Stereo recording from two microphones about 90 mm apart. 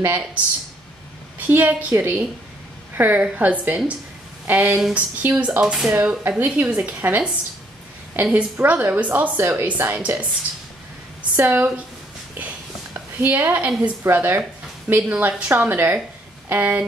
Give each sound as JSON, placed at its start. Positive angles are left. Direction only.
{"t": 1.5, "sound": "a woman's voice", "side_deg": -20}
{"t": 5.6, "sound": "a woman's voice", "side_deg": -10}
{"t": 5.9, "sound": "a woman's voice", "side_deg": -20}
{"t": 11.3, "sound": "speech", "side_deg": -20}
{"t": 13.2, "sound": "a woman's voice", "side_deg": -20}
{"t": 14.0, "sound": "speech", "side_deg": -25}